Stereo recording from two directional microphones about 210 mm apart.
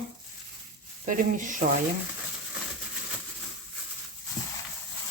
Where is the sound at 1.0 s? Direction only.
40° right (ahead or behind).